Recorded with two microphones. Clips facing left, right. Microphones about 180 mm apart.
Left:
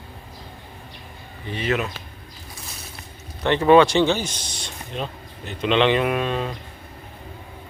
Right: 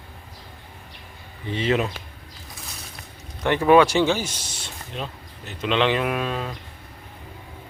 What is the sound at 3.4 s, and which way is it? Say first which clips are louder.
Speech: left 1 dB; 10° right (ahead or behind).